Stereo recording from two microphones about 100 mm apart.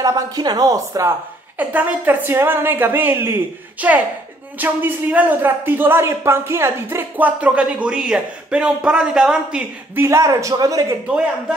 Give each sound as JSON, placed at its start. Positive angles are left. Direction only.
{"t": 0.0, "sound": "speech", "side_deg": -40}
{"t": 1.6, "sound": "a woman's voice", "side_deg": -15}
{"t": 9.9, "sound": "speech", "side_deg": -30}
{"t": 11.1, "sound": "speech", "side_deg": -10}